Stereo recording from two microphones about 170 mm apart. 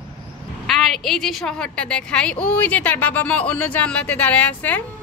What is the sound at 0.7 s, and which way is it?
A woman's voice, centre (ahead or behind).